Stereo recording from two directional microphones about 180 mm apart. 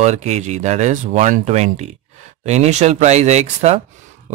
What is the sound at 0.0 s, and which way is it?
Speech, 40° right (ahead or behind).